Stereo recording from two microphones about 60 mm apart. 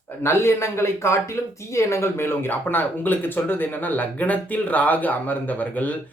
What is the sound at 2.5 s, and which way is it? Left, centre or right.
Speech, left.